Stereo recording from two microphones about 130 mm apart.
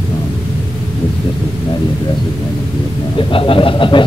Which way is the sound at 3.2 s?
45° left (ahead or behind).